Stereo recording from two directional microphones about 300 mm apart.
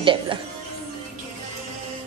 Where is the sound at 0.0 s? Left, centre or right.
Centre.